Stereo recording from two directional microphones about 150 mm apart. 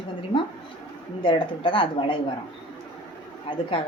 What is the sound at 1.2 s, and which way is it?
Speech, 30° left (ahead or behind).